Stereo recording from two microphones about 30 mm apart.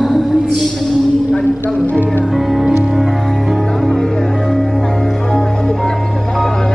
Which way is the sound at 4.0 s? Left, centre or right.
Centre.